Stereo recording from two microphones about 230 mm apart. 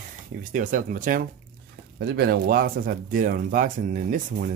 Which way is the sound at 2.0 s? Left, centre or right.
Right.